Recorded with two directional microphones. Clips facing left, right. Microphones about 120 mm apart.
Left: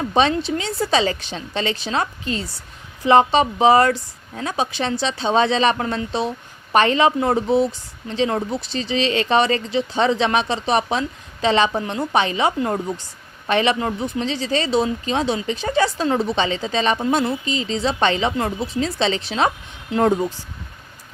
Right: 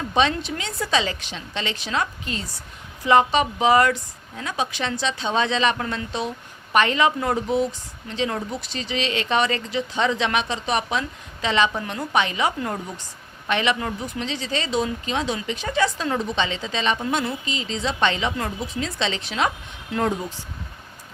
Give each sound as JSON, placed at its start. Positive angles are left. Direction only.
{"t": 0.1, "sound": "speech", "side_deg": 35}